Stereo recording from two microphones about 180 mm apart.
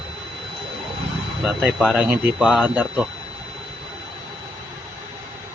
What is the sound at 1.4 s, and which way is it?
Speech, 5° right (ahead or behind).